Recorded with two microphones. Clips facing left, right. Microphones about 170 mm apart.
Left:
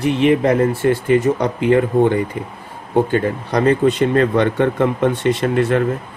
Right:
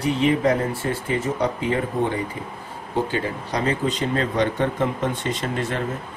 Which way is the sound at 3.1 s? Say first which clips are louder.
Left 7 dB; 55° left (ahead or behind).